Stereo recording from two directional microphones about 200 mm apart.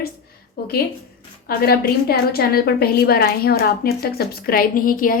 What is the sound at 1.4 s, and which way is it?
A woman's voice, 50° left (ahead or behind).